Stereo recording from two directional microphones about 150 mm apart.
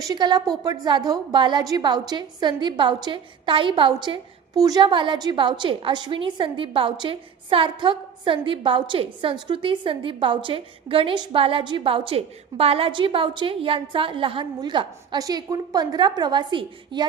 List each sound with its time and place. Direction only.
0.0 s a woman's voice: 25° right (ahead or behind)